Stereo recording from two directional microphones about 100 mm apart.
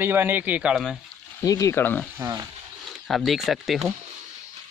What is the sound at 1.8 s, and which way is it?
Speech, 20° left (ahead or behind).